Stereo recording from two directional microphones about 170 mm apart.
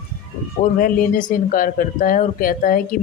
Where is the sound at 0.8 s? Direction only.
55° left (ahead or behind).